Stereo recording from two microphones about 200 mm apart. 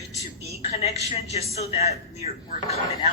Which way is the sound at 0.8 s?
30° left (ahead or behind).